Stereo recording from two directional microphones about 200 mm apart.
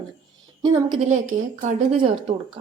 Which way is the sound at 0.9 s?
35° right (ahead or behind).